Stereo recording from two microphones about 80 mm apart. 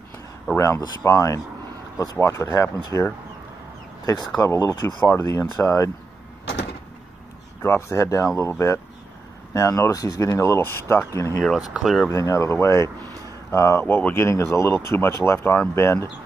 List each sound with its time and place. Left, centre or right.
0.6 s speech: left
7.6 s speech: left
11.4 s speech: centre
12.1 s speech: left
13.8 s speech: left
14.1 s speech: left